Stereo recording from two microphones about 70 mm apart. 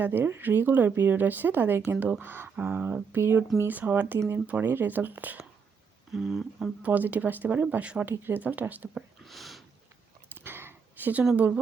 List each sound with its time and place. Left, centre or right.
0.0 s speech: right
6.1 s speech: centre
6.8 s speech: right
9.2 s a sound: centre
10.3 s a sound: right
11.3 s speech: centre